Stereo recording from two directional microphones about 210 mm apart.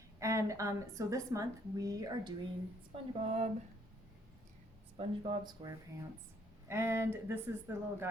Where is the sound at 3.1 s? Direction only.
30° right (ahead or behind).